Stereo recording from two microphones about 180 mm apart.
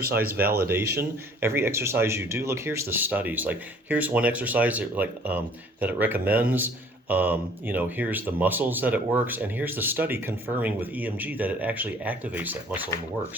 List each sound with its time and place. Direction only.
0.0 s speech: 55° right (ahead or behind)
1.4 s speech: 15° right (ahead or behind)